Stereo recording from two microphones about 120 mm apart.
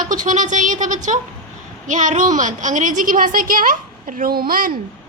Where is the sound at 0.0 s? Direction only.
90° right.